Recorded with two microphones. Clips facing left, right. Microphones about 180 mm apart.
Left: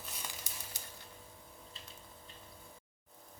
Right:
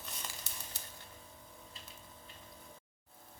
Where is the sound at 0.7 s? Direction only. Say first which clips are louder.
Left 1 dB; 15° left (ahead or behind).